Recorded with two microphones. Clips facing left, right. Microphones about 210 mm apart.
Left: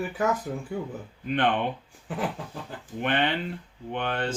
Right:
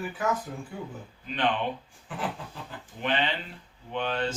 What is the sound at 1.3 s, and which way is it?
Speech, 55° left (ahead or behind).